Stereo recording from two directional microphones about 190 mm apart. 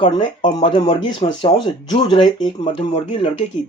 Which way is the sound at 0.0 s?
25° left (ahead or behind).